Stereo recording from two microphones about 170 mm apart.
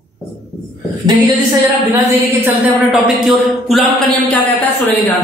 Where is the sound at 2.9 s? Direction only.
5° right (ahead or behind).